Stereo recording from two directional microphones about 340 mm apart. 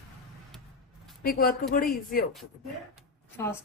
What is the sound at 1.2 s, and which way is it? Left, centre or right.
A woman's voice, left.